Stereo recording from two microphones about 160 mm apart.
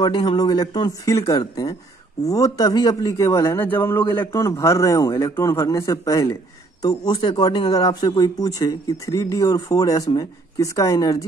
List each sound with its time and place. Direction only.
0.0 s speech: 30° left (ahead or behind)